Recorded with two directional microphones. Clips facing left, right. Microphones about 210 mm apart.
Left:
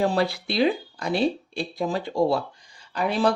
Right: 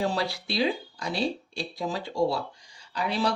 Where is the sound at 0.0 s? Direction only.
55° left (ahead or behind).